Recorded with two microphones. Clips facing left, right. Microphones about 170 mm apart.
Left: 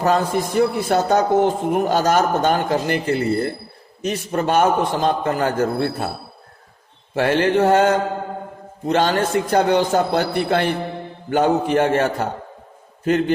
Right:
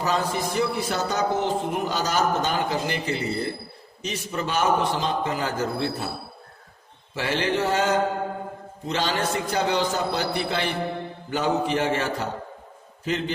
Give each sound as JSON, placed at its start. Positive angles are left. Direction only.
{"t": 0.0, "sound": "a man's voice", "side_deg": 50}
{"t": 7.1, "sound": "a man's voice", "side_deg": 55}